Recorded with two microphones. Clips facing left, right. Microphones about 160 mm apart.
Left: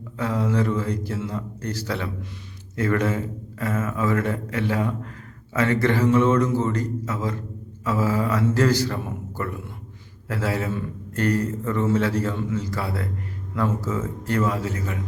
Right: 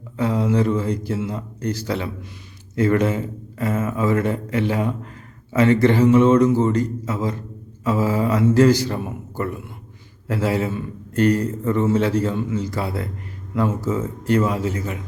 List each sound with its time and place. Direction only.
0.2 s a man's voice: 20° right (ahead or behind)